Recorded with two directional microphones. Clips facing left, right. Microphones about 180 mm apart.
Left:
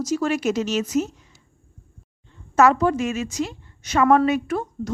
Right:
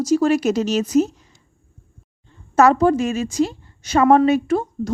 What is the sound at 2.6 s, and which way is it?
Speech, 35° right (ahead or behind).